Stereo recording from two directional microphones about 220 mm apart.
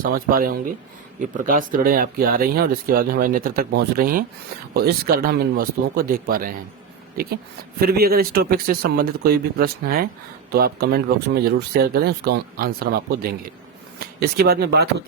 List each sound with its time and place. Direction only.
0.0 s speech: 40° right (ahead or behind)
7.8 s speech: 45° right (ahead or behind)